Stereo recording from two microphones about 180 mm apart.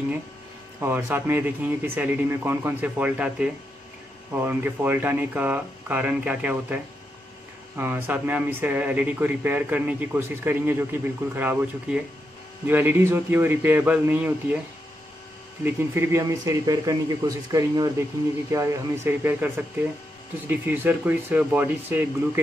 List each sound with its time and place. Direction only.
0.7 s speech: 10° right (ahead or behind)
15.6 s speech: 15° right (ahead or behind)